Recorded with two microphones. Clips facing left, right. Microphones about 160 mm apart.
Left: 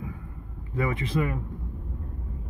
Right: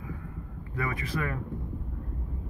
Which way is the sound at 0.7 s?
25° left (ahead or behind).